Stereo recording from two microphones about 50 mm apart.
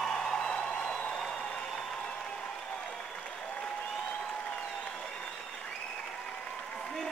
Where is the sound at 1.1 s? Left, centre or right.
Centre.